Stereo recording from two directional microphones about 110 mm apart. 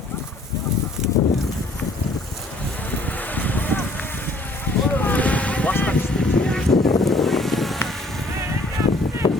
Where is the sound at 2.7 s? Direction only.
15° left (ahead or behind).